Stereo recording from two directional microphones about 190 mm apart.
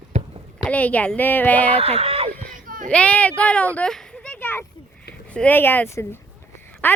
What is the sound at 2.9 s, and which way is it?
Speech, 5° left (ahead or behind).